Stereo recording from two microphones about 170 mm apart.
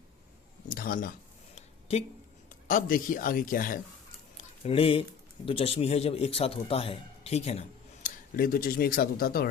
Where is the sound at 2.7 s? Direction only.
55° left (ahead or behind).